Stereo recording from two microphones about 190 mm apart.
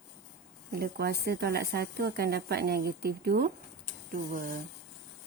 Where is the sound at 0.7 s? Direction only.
55° right (ahead or behind).